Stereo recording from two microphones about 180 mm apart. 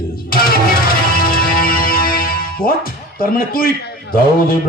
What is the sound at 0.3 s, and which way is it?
Music, 55° left (ahead or behind).